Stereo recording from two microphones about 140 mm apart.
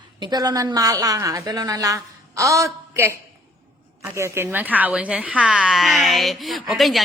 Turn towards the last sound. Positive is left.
turn(degrees=0)  # may be behind; listen again after turning